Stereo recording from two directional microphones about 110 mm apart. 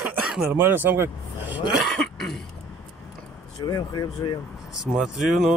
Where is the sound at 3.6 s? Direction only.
35° left (ahead or behind).